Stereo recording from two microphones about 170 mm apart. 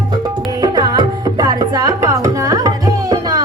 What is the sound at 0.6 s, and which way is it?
Music, 25° right (ahead or behind).